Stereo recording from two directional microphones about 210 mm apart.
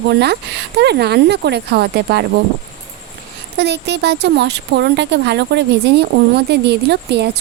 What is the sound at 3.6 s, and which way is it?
Speech, 55° right (ahead or behind).